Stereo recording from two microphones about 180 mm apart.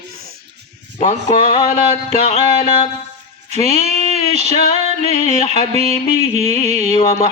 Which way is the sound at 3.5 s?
35° left (ahead or behind).